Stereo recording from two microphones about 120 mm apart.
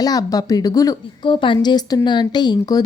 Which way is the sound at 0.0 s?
30° left (ahead or behind).